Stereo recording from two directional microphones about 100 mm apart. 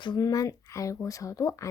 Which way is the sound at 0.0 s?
50° left (ahead or behind).